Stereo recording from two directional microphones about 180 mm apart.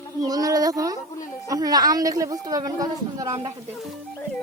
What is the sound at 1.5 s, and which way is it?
A woman's voice, 20° right (ahead or behind).